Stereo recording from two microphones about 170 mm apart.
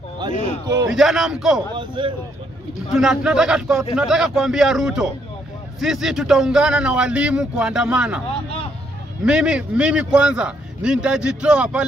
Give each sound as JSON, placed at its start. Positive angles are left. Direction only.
{"t": 0.2, "sound": "a sound", "side_deg": -25}
{"t": 0.8, "sound": "a man's voice", "side_deg": 0}
{"t": 1.8, "sound": "speech", "side_deg": -30}
{"t": 3.0, "sound": "a man's voice", "side_deg": -5}
{"t": 9.2, "sound": "a man's voice", "side_deg": -5}